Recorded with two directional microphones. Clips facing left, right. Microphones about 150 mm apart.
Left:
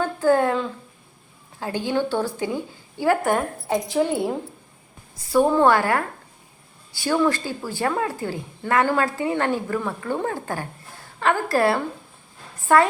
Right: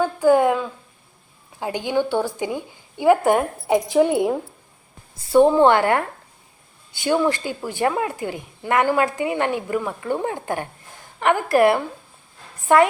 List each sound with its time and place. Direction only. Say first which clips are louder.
0.0 s a sound: right 3 dB; 15° right (ahead or behind)
1.5 s speech: right 2 dB; 15° right (ahead or behind)
5.1 s speech: right 4 dB; 25° right (ahead or behind)